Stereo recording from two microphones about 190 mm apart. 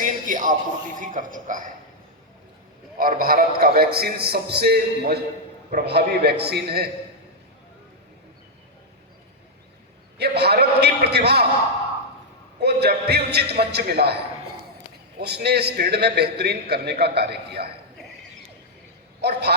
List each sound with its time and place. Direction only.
0.0 s a sound: 45° right (ahead or behind)
0.9 s a man's voice: 45° right (ahead or behind)
3.0 s a man's voice: 50° right (ahead or behind)
10.2 s a man's voice: 60° right (ahead or behind)
12.5 s a man's voice: 60° right (ahead or behind)
15.2 s a man's voice: 60° right (ahead or behind)
19.2 s a man's voice: 60° right (ahead or behind)